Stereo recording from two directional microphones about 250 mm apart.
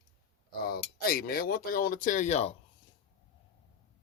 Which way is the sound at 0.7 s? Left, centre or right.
Left.